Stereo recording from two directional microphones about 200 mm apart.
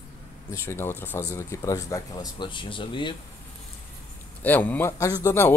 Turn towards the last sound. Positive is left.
turn(degrees=10)  # may be behind; listen again after turning